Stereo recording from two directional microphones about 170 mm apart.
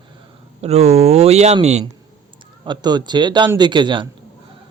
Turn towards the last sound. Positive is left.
turn(degrees=-30)  # may be behind; listen again after turning